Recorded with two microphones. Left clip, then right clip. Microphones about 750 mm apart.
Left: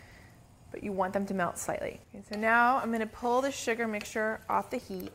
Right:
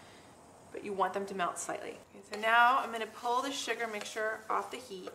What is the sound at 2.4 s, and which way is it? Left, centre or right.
Speech, left.